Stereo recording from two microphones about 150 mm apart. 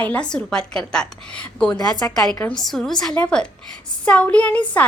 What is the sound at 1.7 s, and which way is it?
Speech, 25° left (ahead or behind).